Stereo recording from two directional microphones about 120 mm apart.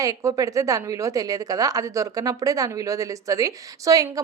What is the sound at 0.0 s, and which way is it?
A woman's voice, 25° right (ahead or behind).